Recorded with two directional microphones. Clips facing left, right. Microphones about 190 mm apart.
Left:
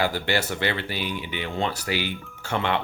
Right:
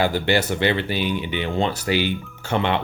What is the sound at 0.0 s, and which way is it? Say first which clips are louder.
Speech: right 5 dB; 20° right (ahead or behind).